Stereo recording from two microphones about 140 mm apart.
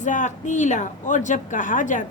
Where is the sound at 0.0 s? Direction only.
65° left (ahead or behind).